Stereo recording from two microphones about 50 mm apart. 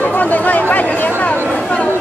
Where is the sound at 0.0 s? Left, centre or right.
Left.